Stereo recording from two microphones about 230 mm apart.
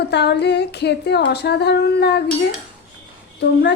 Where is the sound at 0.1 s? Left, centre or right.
Left.